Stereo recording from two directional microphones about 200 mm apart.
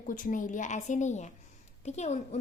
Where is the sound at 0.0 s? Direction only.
40° left (ahead or behind).